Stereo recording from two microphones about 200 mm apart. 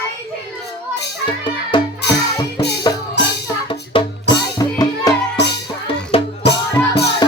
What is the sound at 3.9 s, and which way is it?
Music, 25° left (ahead or behind).